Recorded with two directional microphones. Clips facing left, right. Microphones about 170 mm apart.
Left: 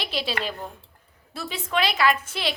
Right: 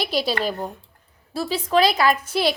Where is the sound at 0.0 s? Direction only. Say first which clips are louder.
Right 6 dB; 40° right (ahead or behind).